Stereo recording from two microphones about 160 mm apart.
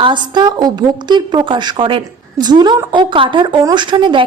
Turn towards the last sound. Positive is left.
turn(degrees=-30)  # may be behind; listen again after turning